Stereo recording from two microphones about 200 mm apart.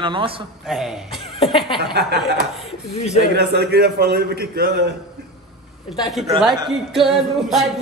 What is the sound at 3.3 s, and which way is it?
A man's voice, 55° right (ahead or behind).